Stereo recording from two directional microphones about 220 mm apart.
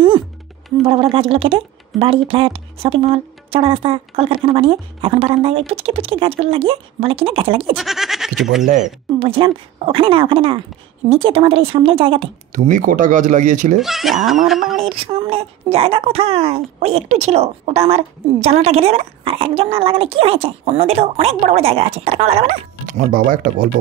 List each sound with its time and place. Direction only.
0.8 s speech: 25° right (ahead or behind)
7.7 s speech: centre (ahead or behind)
9.2 s speech: 25° right (ahead or behind)
12.5 s speech: 35° right (ahead or behind)
13.7 s speech: centre (ahead or behind)
14.8 s speech: 25° right (ahead or behind)